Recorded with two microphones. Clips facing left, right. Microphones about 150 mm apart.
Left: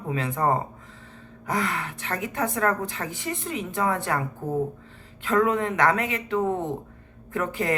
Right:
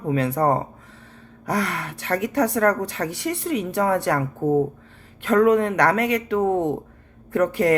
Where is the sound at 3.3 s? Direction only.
70° right (ahead or behind).